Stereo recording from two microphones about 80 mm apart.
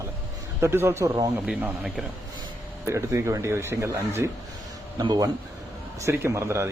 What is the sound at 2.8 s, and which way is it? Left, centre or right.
Speech, right.